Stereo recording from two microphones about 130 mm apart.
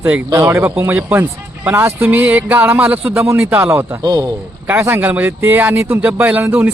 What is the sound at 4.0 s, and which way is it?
Speech, 30° right (ahead or behind).